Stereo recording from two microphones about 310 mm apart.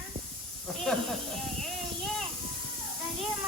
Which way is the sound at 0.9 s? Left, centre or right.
Centre.